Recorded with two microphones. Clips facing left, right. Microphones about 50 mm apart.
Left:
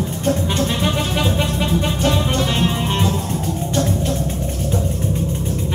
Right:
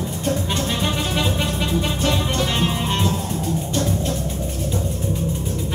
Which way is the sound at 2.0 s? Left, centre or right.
Left.